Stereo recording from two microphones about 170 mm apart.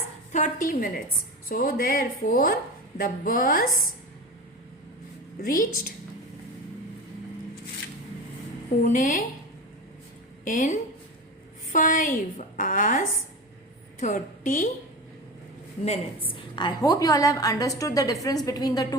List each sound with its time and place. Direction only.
0.3 s a woman's voice: 50° left (ahead or behind)
5.4 s a woman's voice: 55° left (ahead or behind)
8.8 s a woman's voice: 50° left (ahead or behind)
10.4 s a woman's voice: 50° left (ahead or behind)
15.8 s a woman's voice: 35° left (ahead or behind)